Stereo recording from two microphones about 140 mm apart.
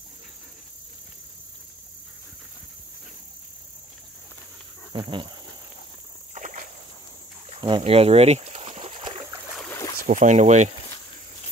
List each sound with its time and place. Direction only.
4.9 s speech: 35° right (ahead or behind)
6.3 s rowboat: 60° right (ahead or behind)
7.4 s a sound: 40° right (ahead or behind)
9.9 s speech: 65° right (ahead or behind)